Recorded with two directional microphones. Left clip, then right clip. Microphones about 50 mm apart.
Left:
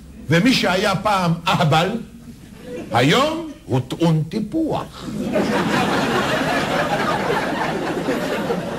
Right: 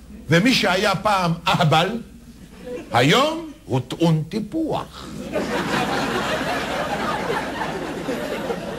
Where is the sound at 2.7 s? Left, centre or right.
Right.